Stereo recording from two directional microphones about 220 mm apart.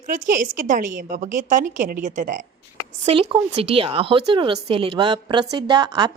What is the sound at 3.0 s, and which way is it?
A woman's voice, 25° right (ahead or behind).